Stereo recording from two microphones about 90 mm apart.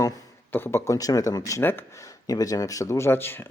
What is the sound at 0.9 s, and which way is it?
Speech, 40° left (ahead or behind).